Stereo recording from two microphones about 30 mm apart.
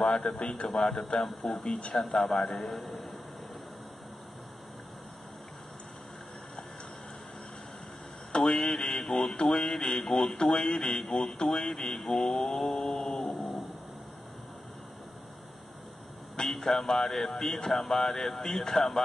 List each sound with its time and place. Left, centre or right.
0.0 s a man's voice: centre
0.7 s a man's voice: centre
8.3 s a man's voice: left
12.0 s mantra: centre
13.3 s a sound: centre
16.4 s speech: centre